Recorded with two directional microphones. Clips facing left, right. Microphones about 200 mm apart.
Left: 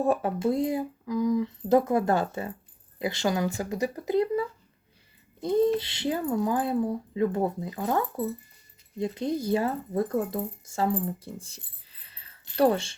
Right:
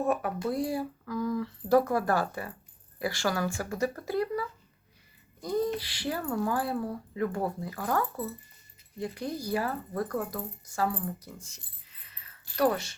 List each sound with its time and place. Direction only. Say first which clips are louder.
0.0 s speech: left 4 dB; 30° left (ahead or behind)